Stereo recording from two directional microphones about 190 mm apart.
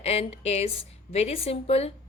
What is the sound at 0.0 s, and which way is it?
A woman's voice, 30° left (ahead or behind).